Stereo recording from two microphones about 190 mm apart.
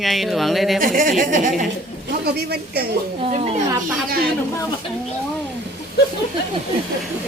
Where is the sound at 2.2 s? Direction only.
55° right (ahead or behind).